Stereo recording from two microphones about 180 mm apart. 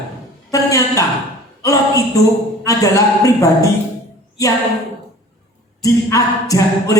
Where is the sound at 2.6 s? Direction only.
20° left (ahead or behind).